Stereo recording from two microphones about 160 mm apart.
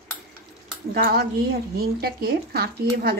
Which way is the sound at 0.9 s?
75° right (ahead or behind).